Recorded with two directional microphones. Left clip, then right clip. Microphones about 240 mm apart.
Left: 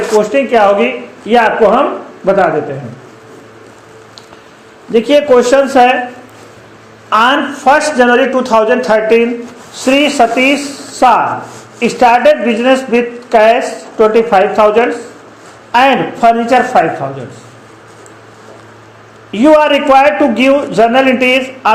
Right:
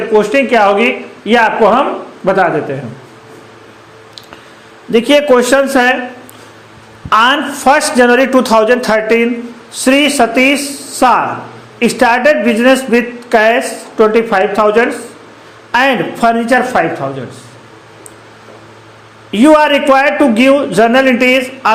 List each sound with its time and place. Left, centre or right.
0.2 s a man's voice: right
4.9 s a man's voice: right
7.1 s a man's voice: right
19.3 s a man's voice: right